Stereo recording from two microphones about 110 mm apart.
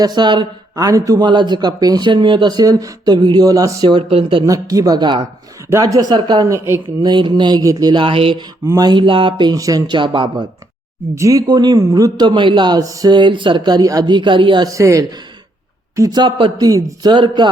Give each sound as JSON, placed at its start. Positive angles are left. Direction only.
{"t": 0.0, "sound": "speech", "side_deg": -40}
{"t": 0.8, "sound": "speech", "side_deg": -30}
{"t": 3.8, "sound": "speech", "side_deg": -55}
{"t": 4.4, "sound": "speech", "side_deg": -35}
{"t": 6.4, "sound": "speech", "side_deg": -25}
{"t": 7.0, "sound": "speech", "side_deg": -45}
{"t": 8.0, "sound": "speech", "side_deg": -55}
{"t": 8.6, "sound": "speech", "side_deg": -35}
{"t": 9.6, "sound": "speech", "side_deg": -35}
{"t": 11.1, "sound": "speech", "side_deg": -30}
{"t": 12.8, "sound": "speech", "side_deg": -30}
{"t": 14.7, "sound": "speech", "side_deg": -30}